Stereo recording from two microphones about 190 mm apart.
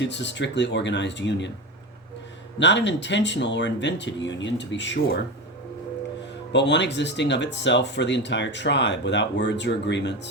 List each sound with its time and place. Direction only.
0.0 s speech: 70° left (ahead or behind)
2.6 s speech: 70° left (ahead or behind)
6.5 s speech: 65° left (ahead or behind)